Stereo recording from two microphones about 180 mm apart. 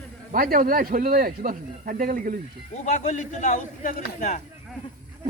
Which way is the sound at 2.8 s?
40° left (ahead or behind).